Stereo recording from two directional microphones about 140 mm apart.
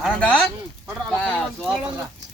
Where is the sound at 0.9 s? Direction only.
5° left (ahead or behind).